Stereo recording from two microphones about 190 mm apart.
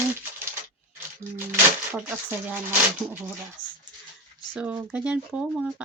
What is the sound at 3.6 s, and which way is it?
Dog, 25° left (ahead or behind).